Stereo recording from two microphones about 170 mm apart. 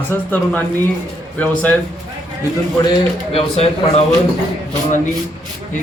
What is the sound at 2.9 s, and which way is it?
Speech, 35° left (ahead or behind).